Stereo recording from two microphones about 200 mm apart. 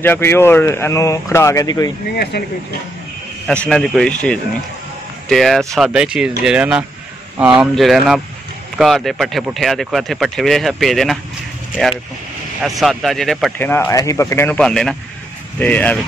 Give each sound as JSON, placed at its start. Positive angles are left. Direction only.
{"t": 0.0, "sound": "speech", "side_deg": 10}
{"t": 2.3, "sound": "speech", "side_deg": 55}
{"t": 3.4, "sound": "speech", "side_deg": 5}
{"t": 12.6, "sound": "speech", "side_deg": 0}